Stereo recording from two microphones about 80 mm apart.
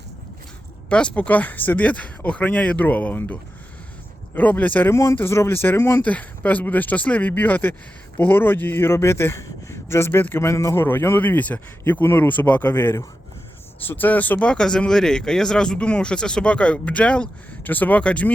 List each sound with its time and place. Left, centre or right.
0.9 s a man's voice: centre
4.4 s a man's voice: centre
4.9 s speech: left
6.1 s a man's voice: centre